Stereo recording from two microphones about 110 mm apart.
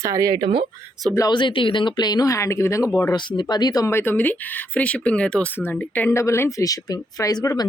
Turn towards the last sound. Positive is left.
turn(degrees=30)  # may be behind; listen again after turning